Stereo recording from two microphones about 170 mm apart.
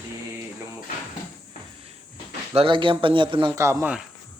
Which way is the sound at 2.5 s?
30° right (ahead or behind).